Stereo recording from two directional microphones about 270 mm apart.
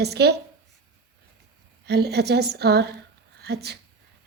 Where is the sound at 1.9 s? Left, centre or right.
Right.